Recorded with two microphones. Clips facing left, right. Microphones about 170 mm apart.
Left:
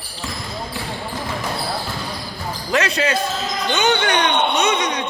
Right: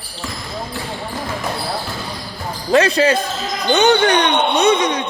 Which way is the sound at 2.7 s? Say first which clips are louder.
Right 6 dB; 35° right (ahead or behind).